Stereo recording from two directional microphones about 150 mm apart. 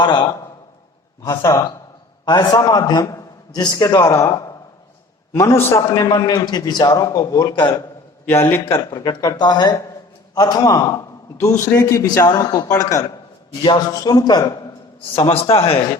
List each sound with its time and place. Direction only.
0.0 s a man's voice: 30° left (ahead or behind)
1.2 s a man's voice: 20° left (ahead or behind)
8.9 s a man's voice: 25° left (ahead or behind)
15.1 s a man's voice: 40° left (ahead or behind)